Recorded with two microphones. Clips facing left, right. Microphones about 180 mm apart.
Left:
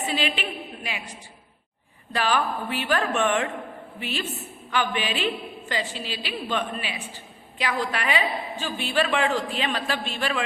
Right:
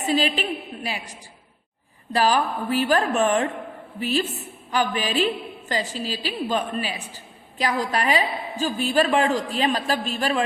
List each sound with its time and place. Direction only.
0.1 s a woman's voice: 40° right (ahead or behind)
2.1 s a woman's voice: 35° right (ahead or behind)